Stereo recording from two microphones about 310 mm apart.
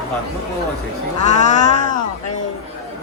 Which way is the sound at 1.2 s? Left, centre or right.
Left.